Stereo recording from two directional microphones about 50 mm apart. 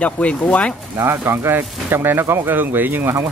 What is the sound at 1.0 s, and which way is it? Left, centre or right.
Speech, right.